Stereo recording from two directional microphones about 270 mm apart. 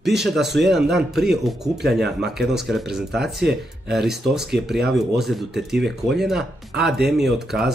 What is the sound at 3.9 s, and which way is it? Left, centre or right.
Speech, centre.